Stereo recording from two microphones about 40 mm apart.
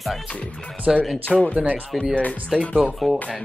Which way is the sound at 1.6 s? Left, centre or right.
Right.